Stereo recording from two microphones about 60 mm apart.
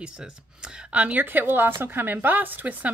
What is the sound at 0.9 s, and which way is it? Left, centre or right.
Speech, right.